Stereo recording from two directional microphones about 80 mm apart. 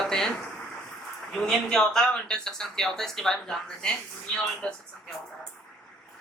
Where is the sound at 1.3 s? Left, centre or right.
Centre.